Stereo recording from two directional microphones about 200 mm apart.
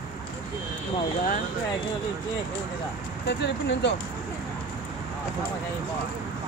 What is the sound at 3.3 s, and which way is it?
Speech, 60° left (ahead or behind).